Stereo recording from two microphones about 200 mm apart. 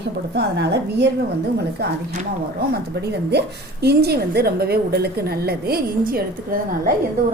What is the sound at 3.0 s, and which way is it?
A woman's voice, 55° right (ahead or behind).